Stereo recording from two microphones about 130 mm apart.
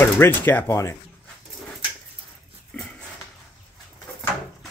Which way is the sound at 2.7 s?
15° left (ahead or behind).